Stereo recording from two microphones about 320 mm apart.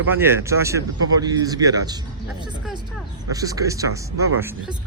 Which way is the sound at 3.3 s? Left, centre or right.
Centre.